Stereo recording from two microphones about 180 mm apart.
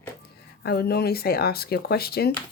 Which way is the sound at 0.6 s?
60° left (ahead or behind).